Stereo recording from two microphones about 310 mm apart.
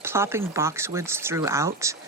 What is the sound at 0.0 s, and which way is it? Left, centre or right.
Speech, centre.